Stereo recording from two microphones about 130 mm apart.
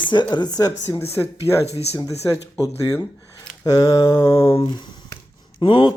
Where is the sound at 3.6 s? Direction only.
25° left (ahead or behind).